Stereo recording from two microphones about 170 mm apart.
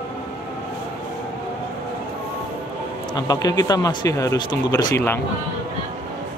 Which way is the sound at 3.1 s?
20° left (ahead or behind).